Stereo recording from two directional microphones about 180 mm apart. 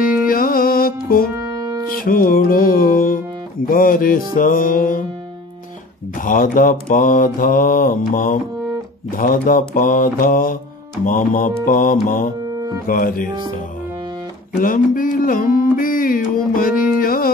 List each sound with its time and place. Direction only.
0.3 s music: 50° left (ahead or behind)
1.3 s music: 20° right (ahead or behind)
2.0 s mantra: 50° left (ahead or behind)
6.1 s mantra: 50° left (ahead or behind)
14.5 s a sound: 50° left (ahead or behind)